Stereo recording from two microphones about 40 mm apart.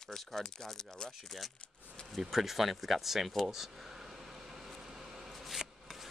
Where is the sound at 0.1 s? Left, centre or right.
Centre.